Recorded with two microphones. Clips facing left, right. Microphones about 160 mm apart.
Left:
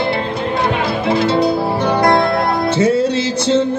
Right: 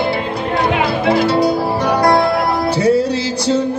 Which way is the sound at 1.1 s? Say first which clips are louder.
Left 1 dB; 20° left (ahead or behind).